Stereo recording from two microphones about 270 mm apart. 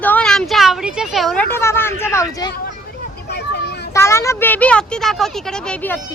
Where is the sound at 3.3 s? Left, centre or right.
Left.